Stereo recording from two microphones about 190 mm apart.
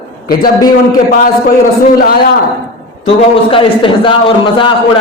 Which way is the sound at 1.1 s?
45° left (ahead or behind).